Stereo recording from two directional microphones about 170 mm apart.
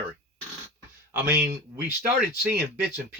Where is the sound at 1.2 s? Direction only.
15° right (ahead or behind).